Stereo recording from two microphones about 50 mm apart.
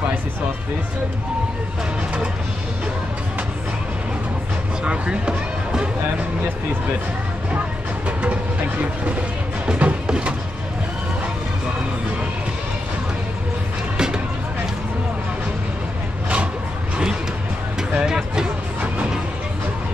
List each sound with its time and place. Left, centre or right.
4.8 s speech: right
9.7 s music: right
10.0 s a sound: centre
13.9 s music: centre
17.9 s vehicle: centre